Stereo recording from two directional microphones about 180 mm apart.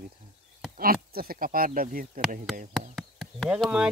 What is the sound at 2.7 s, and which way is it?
Chop, centre (ahead or behind).